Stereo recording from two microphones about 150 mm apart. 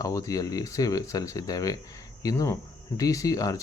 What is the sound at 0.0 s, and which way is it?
Speech, 20° left (ahead or behind).